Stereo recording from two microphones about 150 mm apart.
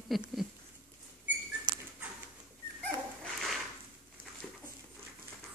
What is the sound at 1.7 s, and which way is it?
Dog, 30° right (ahead or behind).